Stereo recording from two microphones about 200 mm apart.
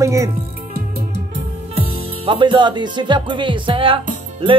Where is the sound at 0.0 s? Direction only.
15° right (ahead or behind).